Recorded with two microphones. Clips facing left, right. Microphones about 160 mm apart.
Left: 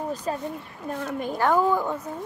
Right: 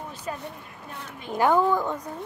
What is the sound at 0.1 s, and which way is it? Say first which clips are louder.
A woman's voice: left 6 dB; 35° left (ahead or behind).